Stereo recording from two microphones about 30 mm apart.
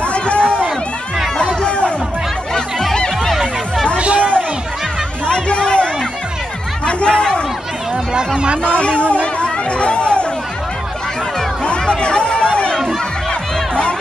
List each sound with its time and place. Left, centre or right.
0.0 s run: left
1.4 s chatter: left
4.0 s chatter: right
5.3 s a sound: left
6.9 s chatter: left
8.6 s chatter: left
11.8 s chatter: left
13.3 s music: left